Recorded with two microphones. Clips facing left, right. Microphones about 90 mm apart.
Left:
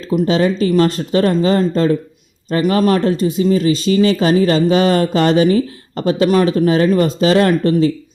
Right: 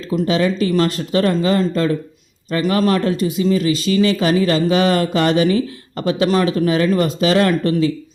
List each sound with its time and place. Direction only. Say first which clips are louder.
0.3 s speech: left 2 dB; 30° left (ahead or behind)